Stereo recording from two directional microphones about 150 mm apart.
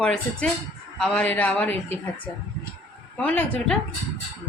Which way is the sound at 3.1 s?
10° left (ahead or behind).